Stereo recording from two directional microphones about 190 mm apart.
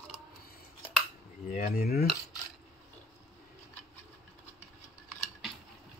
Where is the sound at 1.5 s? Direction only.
45° left (ahead or behind).